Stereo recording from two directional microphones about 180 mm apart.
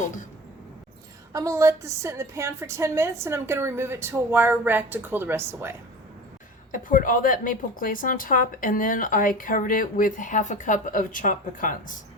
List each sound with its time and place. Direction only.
1.3 s a woman's voice: 15° right (ahead or behind)
6.7 s a woman's voice: 50° left (ahead or behind)